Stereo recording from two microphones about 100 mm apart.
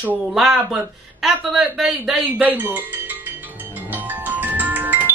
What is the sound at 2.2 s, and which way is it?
Music, 15° right (ahead or behind).